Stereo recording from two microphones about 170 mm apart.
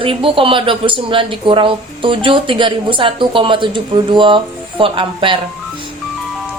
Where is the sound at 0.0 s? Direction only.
30° right (ahead or behind).